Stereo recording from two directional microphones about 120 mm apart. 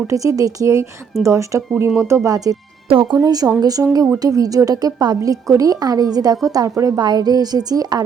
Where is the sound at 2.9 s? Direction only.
45° right (ahead or behind).